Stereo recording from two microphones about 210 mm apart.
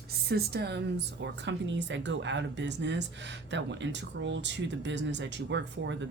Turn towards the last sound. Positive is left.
turn(degrees=-55)  # may be behind; listen again after turning